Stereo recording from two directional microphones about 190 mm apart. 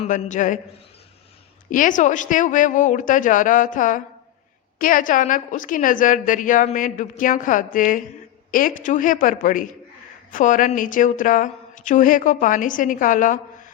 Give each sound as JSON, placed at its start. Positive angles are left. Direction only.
{"t": 0.0, "sound": "a man's voice", "side_deg": 40}
{"t": 1.7, "sound": "a woman's voice", "side_deg": 45}